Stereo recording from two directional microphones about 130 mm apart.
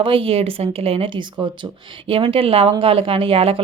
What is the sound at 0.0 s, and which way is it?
Speech, 45° right (ahead or behind).